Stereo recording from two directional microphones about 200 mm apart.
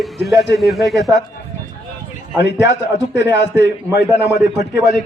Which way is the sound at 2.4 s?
60° left (ahead or behind).